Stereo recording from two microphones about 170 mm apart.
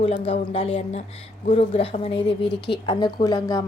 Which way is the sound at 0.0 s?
35° left (ahead or behind).